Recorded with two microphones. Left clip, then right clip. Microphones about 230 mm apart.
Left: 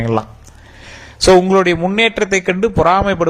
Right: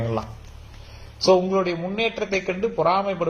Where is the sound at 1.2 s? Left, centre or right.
Left.